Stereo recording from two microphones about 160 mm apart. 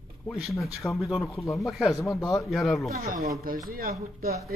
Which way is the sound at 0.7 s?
Centre (ahead or behind).